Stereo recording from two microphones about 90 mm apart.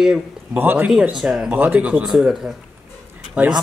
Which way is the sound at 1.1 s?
5° right (ahead or behind).